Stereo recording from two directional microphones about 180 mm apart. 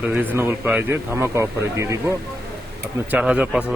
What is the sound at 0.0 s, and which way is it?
Speech, 10° right (ahead or behind).